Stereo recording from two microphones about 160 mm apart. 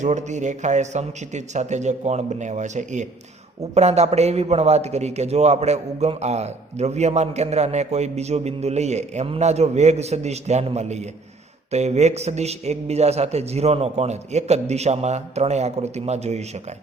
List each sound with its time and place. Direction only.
0.0 s a man's voice: 50° right (ahead or behind)